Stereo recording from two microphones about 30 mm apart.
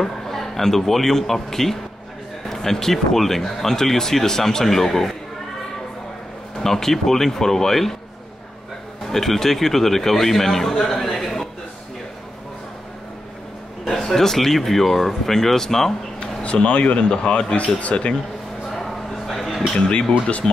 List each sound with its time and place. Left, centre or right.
0.0 s speech: centre
6.6 s speech: centre
9.0 s speech: centre
13.8 s speech: centre
16.2 s speech: left
17.6 s speech: left
18.9 s a sound: centre